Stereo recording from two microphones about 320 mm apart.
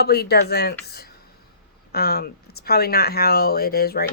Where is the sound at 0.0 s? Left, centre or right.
Left.